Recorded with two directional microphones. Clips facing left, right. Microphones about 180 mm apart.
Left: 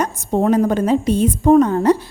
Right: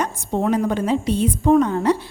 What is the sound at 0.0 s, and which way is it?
A woman's voice, 40° left (ahead or behind).